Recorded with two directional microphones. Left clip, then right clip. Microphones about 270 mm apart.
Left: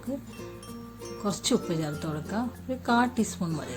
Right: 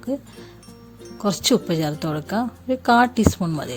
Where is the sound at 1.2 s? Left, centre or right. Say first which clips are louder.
Right 8 dB; right.